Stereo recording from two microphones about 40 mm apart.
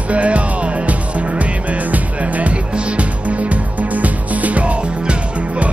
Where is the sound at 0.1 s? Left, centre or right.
Right.